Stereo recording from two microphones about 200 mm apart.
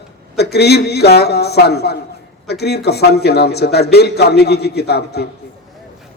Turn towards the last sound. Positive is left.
turn(degrees=55)  # may be behind; listen again after turning